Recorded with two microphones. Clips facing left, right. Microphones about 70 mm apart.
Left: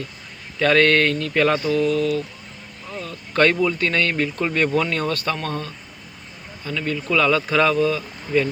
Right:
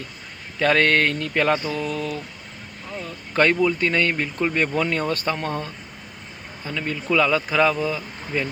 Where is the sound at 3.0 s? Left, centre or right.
Centre.